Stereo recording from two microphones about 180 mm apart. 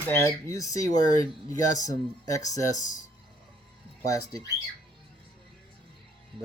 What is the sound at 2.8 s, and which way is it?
Speech, 45° left (ahead or behind).